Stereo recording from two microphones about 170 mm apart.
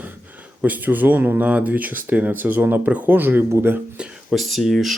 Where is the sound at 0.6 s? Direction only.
10° right (ahead or behind).